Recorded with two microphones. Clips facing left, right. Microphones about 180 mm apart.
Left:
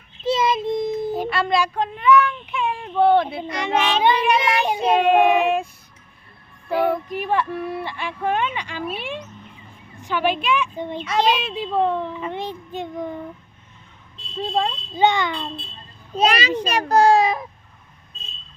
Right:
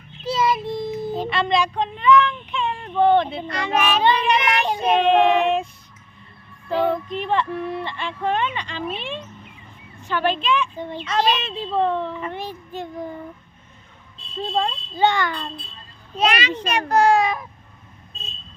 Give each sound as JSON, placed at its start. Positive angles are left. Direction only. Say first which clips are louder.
{"t": 0.3, "sound": "a child's voice", "louder": "left 2 dB", "side_deg": 25}
{"t": 3.5, "sound": "speech", "louder": "even", "side_deg": 20}
{"t": 4.0, "sound": "a woman's voice", "louder": "left 1 dB", "side_deg": 10}
{"t": 6.7, "sound": "a woman's voice", "louder": "even", "side_deg": 10}
{"t": 14.3, "sound": "speech", "louder": "left 1 dB", "side_deg": 5}
{"t": 14.9, "sound": "a woman's voice", "louder": "left 1 dB", "side_deg": 15}
{"t": 16.1, "sound": "speech", "louder": "left 2 dB", "side_deg": 35}